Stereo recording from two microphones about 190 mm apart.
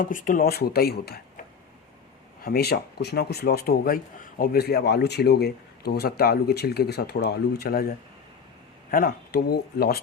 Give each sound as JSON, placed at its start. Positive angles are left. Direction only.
{"t": 0.0, "sound": "speech", "side_deg": 45}
{"t": 2.4, "sound": "speech", "side_deg": 55}